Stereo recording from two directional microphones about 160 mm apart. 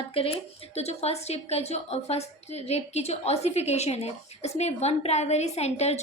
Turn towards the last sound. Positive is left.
turn(degrees=40)  # may be behind; listen again after turning